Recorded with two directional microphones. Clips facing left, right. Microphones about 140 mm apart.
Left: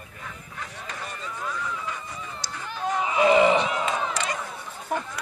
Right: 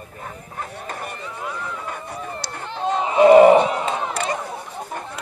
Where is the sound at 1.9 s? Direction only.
55° right (ahead or behind).